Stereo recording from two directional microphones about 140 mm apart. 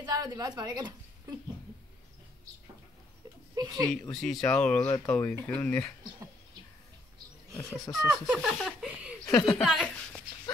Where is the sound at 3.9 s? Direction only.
5° left (ahead or behind).